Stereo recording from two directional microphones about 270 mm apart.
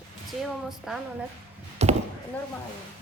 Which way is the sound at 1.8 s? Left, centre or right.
Right.